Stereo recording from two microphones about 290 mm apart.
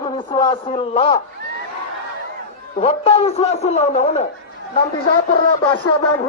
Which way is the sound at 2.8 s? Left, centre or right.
Left.